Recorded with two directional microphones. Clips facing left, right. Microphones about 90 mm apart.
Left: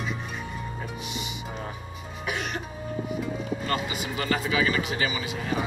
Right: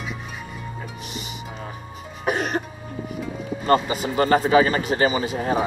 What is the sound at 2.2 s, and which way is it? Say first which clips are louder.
Cough: right 8 dB; 40° right (ahead or behind).